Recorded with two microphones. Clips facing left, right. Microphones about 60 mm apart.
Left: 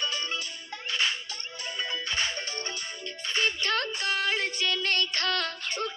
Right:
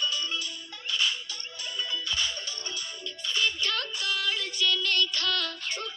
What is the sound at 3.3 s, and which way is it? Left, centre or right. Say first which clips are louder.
Child singing: left 1 dB; left.